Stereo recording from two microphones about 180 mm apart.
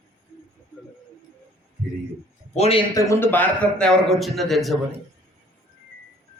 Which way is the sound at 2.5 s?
35° left (ahead or behind).